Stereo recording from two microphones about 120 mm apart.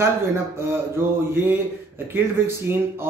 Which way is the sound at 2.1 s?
20° right (ahead or behind).